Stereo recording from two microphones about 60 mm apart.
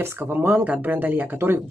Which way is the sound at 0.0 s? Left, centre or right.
Right.